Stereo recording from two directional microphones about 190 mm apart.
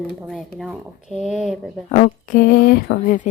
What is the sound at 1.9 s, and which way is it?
Speech, 40° left (ahead or behind).